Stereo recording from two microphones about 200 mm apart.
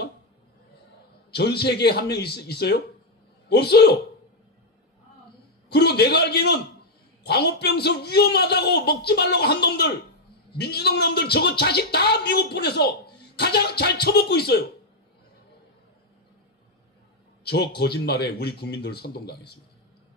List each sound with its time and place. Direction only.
1.3 s a man's voice: 55° left (ahead or behind)
5.7 s a man's voice: 55° left (ahead or behind)
17.5 s speech: 55° left (ahead or behind)